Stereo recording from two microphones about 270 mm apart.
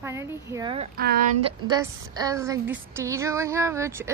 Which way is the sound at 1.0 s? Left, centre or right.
Right.